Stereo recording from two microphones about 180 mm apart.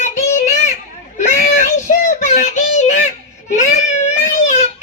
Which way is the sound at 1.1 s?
40° left (ahead or behind).